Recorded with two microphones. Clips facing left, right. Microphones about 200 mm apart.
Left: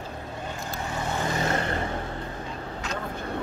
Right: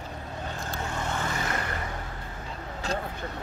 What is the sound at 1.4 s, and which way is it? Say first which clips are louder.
Vehicle: left 5 dB; 30° left (ahead or behind).